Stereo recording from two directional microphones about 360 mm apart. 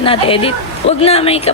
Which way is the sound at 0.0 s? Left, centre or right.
Centre.